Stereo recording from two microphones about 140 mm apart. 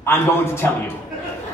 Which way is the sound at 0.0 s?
15° left (ahead or behind).